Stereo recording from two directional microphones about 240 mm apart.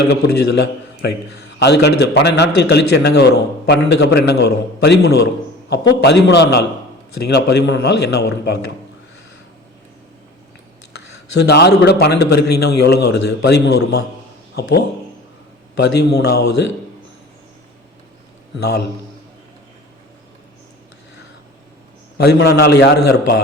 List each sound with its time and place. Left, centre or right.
0.1 s a man's voice: left
11.3 s a man's voice: left
18.6 s a man's voice: left
22.2 s a man's voice: left